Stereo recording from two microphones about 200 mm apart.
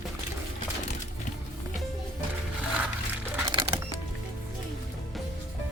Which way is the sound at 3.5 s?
25° right (ahead or behind).